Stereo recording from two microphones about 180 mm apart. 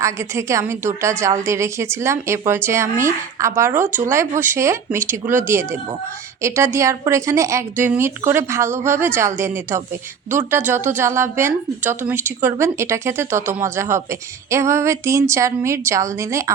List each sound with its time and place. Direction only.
0.0 s a woman's voice: 15° right (ahead or behind)
6.4 s a woman's voice: 15° right (ahead or behind)